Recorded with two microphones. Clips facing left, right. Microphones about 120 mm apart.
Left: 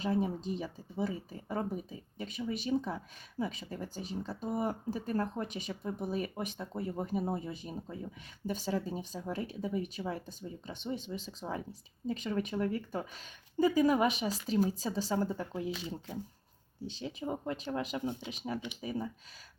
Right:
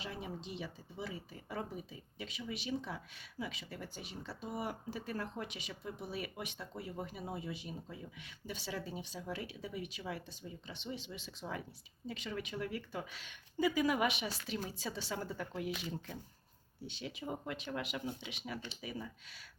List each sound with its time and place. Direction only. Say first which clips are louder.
0.0 s speech: left 12 dB; 40° left (ahead or behind)